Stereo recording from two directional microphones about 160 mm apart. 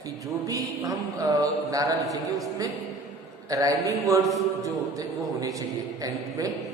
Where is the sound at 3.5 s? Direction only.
20° right (ahead or behind).